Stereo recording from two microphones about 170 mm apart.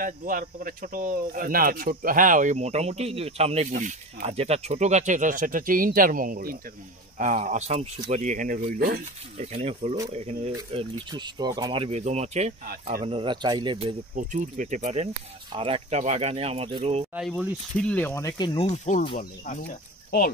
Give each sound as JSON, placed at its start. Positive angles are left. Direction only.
{"t": 0.0, "sound": "speech", "side_deg": -55}
{"t": 9.4, "sound": "speech", "side_deg": -40}
{"t": 10.7, "sound": "speech", "side_deg": -30}
{"t": 14.1, "sound": "speech", "side_deg": -45}
{"t": 15.5, "sound": "speech", "side_deg": -35}
{"t": 17.1, "sound": "speech", "side_deg": -5}
{"t": 18.7, "sound": "speech", "side_deg": 45}